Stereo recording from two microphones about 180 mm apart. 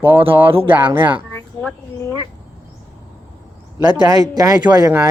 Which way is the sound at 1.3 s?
10° left (ahead or behind).